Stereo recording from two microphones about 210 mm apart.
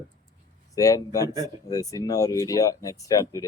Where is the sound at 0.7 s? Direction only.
15° left (ahead or behind).